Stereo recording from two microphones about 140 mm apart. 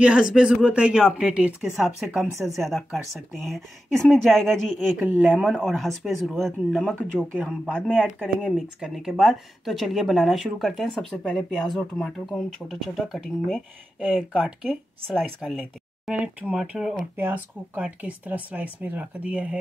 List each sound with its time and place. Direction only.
0.0 s a woman's voice: 5° right (ahead or behind)
5.0 s speech: 10° right (ahead or behind)
5.4 s a woman's voice: centre (ahead or behind)
8.4 s a woman's voice: centre (ahead or behind)
16.1 s speech: 10° right (ahead or behind)